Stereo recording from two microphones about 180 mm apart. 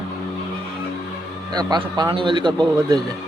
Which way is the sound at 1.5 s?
25° right (ahead or behind).